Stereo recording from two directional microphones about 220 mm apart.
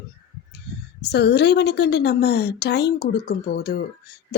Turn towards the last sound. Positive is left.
turn(degrees=45)  # may be behind; listen again after turning